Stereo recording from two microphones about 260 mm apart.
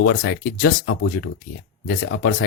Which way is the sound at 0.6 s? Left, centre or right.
Left.